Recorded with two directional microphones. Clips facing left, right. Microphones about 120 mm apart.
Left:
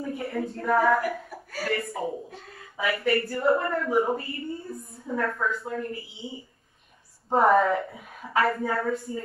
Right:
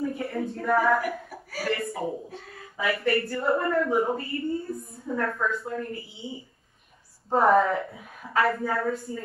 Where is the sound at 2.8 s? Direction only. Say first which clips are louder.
Even; centre (ahead or behind).